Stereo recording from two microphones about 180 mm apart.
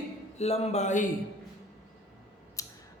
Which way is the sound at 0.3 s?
35° left (ahead or behind).